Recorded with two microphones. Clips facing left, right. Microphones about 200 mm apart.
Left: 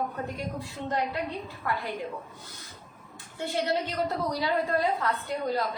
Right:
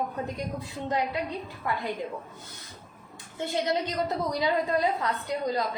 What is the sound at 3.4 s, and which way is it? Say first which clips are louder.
A woman's voice: right 1 dB; 20° right (ahead or behind).